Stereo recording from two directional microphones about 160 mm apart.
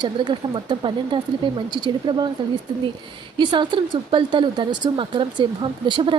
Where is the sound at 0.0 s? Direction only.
30° right (ahead or behind).